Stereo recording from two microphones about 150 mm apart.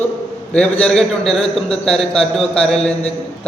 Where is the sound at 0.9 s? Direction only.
5° left (ahead or behind).